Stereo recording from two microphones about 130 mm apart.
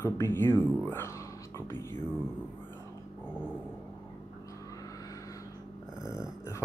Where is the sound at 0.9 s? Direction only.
20° left (ahead or behind).